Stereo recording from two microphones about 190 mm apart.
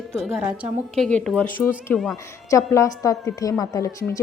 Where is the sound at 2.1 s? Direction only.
15° left (ahead or behind).